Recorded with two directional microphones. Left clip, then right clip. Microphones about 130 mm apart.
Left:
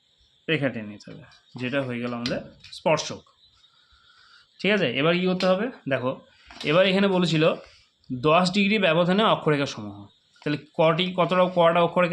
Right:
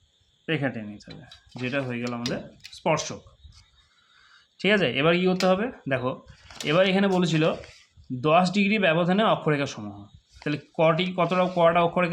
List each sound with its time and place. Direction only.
0.4 s speech: 15° left (ahead or behind)
4.5 s speech: centre (ahead or behind); by 12.1 s 15° left (ahead or behind)